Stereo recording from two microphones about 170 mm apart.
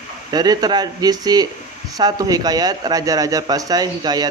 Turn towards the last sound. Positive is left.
turn(degrees=-25)  # may be behind; listen again after turning